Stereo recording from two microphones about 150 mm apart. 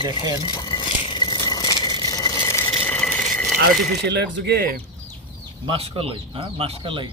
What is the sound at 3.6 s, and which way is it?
Speech, 90° right.